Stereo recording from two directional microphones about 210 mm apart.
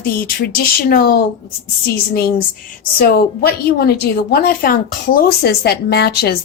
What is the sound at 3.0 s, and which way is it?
A woman's voice, 45° left (ahead or behind).